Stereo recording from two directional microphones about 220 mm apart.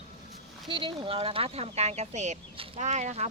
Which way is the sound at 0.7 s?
20° right (ahead or behind).